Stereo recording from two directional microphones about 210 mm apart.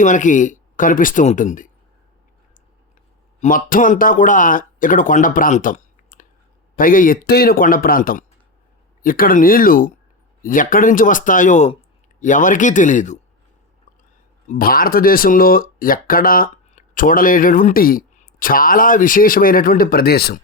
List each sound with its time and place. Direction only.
0.0 s speech: 35° left (ahead or behind)
3.4 s speech: 40° left (ahead or behind)
14.4 s speech: 40° left (ahead or behind)